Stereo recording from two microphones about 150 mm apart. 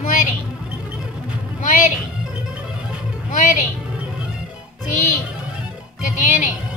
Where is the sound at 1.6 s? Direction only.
60° left (ahead or behind).